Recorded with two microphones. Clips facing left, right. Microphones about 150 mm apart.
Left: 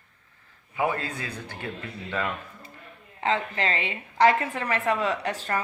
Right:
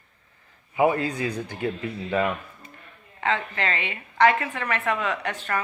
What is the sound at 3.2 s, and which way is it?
A woman's voice, 30° left (ahead or behind).